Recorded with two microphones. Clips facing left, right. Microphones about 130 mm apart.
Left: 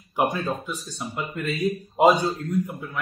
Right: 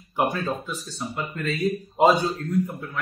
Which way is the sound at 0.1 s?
15° left (ahead or behind).